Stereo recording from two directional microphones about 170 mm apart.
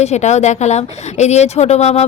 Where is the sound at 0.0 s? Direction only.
40° left (ahead or behind).